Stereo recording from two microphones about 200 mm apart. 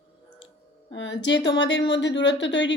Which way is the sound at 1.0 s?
65° left (ahead or behind).